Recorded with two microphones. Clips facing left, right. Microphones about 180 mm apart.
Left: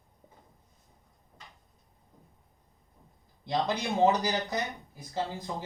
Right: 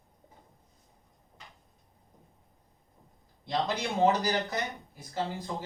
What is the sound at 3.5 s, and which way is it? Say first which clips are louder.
Speech: left 1 dB; 20° left (ahead or behind).